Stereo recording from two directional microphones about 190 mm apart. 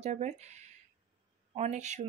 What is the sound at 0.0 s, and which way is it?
Speech, 35° right (ahead or behind).